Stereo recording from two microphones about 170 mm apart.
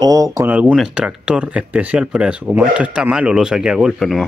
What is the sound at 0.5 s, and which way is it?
Speech, 5° right (ahead or behind).